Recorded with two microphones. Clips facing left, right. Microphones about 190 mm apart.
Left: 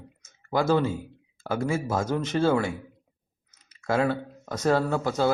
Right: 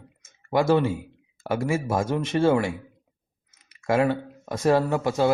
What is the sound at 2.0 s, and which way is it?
Speech, 20° right (ahead or behind).